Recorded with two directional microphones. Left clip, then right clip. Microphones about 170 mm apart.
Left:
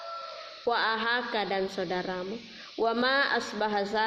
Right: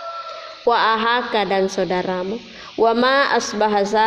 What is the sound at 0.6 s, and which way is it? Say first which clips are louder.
A woman's voice: right 11 dB; 45° right (ahead or behind).